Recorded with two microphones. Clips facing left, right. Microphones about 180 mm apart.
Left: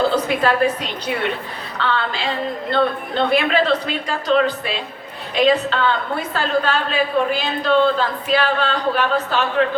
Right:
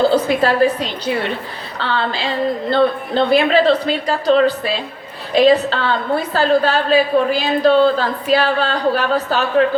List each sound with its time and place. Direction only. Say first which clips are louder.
0.1 s speech: right 3 dB; 30° right (ahead or behind)